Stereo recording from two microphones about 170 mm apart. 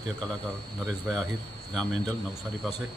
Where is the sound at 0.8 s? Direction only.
Centre (ahead or behind).